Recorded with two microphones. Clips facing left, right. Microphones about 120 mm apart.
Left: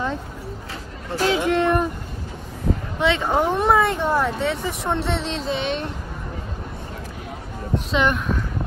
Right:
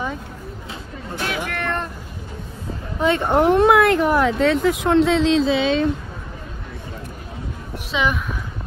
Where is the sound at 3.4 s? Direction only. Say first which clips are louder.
Right 6 dB; 90° right.